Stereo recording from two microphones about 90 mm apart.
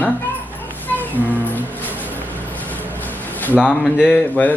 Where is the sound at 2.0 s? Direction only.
20° left (ahead or behind).